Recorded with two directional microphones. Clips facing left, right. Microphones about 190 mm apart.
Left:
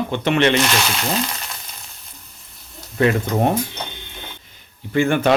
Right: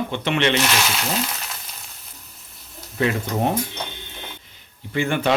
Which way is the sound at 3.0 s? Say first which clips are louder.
Left 5 dB; 50° left (ahead or behind).